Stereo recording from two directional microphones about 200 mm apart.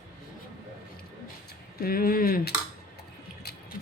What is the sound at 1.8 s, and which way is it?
Speech, 45° left (ahead or behind).